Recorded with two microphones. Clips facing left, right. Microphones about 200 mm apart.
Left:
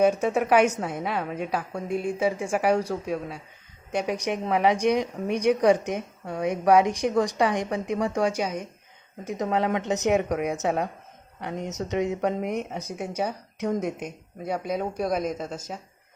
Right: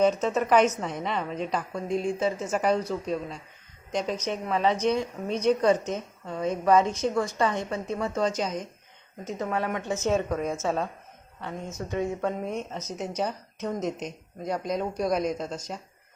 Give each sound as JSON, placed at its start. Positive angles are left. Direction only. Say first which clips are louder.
{"t": 0.0, "sound": "a woman's voice", "louder": "left 2 dB", "side_deg": 10}